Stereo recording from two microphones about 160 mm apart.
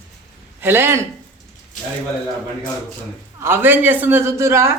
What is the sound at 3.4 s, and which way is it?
Speech, 15° right (ahead or behind).